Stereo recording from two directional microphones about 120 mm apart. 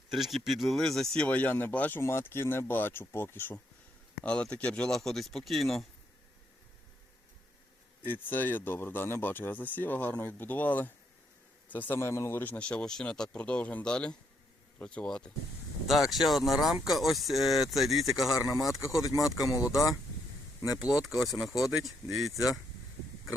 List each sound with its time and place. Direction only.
0.1 s speech: centre (ahead or behind)
8.0 s speech: 15° left (ahead or behind); by 19.5 s centre (ahead or behind)
21.0 s speech: centre (ahead or behind)